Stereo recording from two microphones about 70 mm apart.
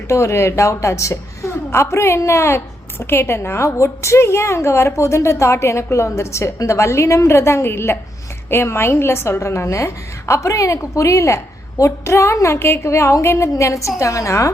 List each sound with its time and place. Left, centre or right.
0.1 s a woman's voice: left